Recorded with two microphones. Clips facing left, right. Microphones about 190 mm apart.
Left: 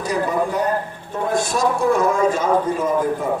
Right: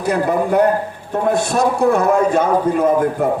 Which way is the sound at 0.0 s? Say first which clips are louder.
Right 4 dB; 60° right (ahead or behind).